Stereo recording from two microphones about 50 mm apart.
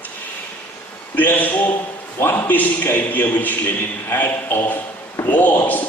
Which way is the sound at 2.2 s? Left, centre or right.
Left.